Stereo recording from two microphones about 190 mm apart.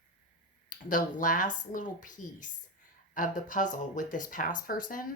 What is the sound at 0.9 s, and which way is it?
Speech, 45° left (ahead or behind).